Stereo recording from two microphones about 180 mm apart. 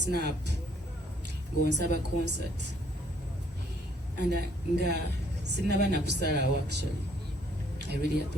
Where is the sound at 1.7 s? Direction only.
65° right (ahead or behind).